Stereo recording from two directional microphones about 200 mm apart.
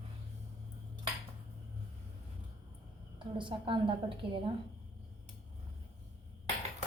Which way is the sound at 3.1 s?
25° right (ahead or behind).